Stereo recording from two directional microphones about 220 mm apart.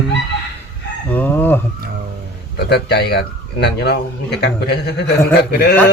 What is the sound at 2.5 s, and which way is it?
Speech, 50° left (ahead or behind).